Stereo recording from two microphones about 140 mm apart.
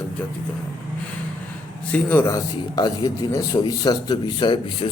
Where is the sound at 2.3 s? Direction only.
25° left (ahead or behind).